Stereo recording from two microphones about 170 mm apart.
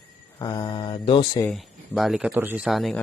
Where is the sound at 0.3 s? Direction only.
20° left (ahead or behind).